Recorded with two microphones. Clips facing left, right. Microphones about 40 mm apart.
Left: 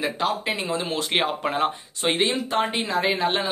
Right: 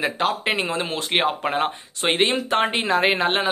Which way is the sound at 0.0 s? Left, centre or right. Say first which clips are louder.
Right 2 dB; right.